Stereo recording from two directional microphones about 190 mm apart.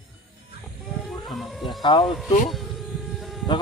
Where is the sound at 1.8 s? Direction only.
20° left (ahead or behind).